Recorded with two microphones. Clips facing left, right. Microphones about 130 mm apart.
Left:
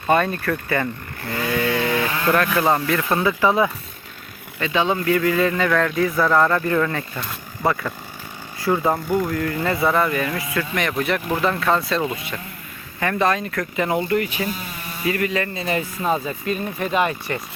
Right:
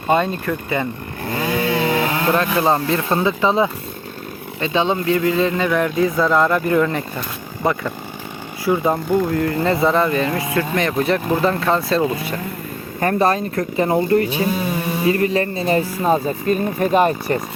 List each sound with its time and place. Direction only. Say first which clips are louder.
0.1 s speech: right 1 dB; 20° right (ahead or behind)
9.0 s speech: right 4 dB; 30° right (ahead or behind)